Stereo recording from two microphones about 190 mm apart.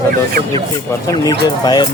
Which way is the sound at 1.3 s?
20° left (ahead or behind).